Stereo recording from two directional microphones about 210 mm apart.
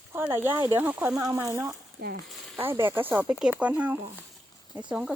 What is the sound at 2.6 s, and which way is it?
Speech, 10° right (ahead or behind).